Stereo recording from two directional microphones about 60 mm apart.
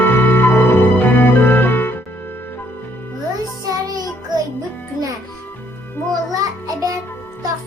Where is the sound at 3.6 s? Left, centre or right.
Right.